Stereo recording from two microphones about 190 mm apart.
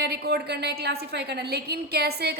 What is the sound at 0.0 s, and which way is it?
A woman's voice, 55° right (ahead or behind).